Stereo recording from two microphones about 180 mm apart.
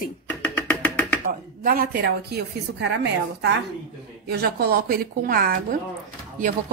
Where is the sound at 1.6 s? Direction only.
60° right (ahead or behind); by 3.5 s 80° right.